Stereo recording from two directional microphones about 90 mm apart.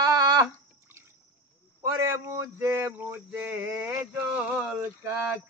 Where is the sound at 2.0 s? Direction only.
30° right (ahead or behind).